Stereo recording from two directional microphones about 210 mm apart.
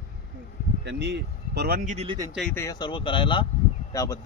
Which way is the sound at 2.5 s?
20° left (ahead or behind).